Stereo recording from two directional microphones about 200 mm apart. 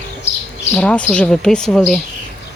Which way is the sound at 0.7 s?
5° left (ahead or behind).